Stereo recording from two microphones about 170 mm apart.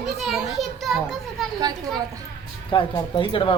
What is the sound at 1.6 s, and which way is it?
Speech, 25° right (ahead or behind).